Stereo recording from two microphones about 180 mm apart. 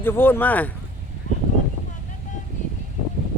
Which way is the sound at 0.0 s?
10° left (ahead or behind).